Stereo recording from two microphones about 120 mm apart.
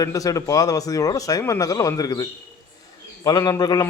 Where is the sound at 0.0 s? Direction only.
30° left (ahead or behind).